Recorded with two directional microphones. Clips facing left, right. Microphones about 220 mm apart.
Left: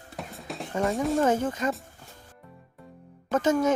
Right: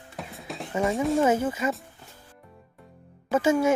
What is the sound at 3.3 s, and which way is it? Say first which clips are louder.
Speech: right 1 dB; 10° right (ahead or behind).